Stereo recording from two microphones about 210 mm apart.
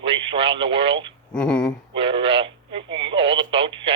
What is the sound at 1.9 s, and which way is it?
Speech, 25° right (ahead or behind).